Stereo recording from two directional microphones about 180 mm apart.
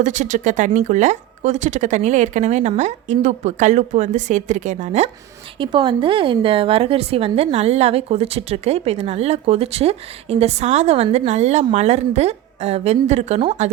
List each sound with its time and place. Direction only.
0.0 s speech: 45° right (ahead or behind)
5.5 s a woman's voice: 25° right (ahead or behind)